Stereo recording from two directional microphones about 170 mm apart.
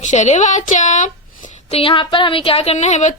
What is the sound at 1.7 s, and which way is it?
Speech, 35° left (ahead or behind).